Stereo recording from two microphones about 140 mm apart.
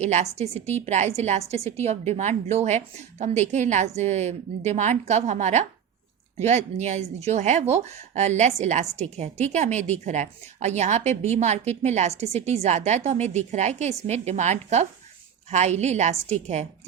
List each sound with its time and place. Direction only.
0.0 s a woman's voice: 55° right (ahead or behind)